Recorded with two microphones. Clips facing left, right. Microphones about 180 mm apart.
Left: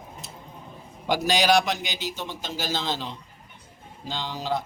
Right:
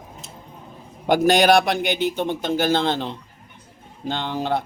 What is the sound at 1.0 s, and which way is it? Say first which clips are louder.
A man's voice: right 7 dB; 55° right (ahead or behind).